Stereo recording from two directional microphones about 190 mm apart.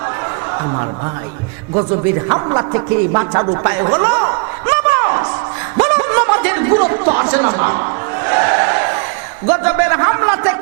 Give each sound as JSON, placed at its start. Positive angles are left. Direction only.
{"t": 2.3, "sound": "a man's voice", "side_deg": -25}
{"t": 5.8, "sound": "a sound", "side_deg": -20}
{"t": 9.5, "sound": "a man's voice", "side_deg": -15}